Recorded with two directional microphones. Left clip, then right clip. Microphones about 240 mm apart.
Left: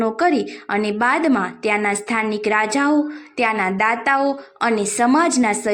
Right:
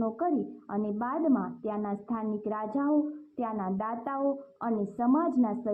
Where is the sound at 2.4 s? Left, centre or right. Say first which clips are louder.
Left 15 dB; left.